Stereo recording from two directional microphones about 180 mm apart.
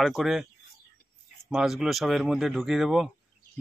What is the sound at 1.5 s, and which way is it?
Speech, centre (ahead or behind).